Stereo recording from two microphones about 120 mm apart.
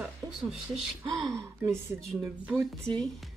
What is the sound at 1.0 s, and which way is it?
Speech, 40° right (ahead or behind).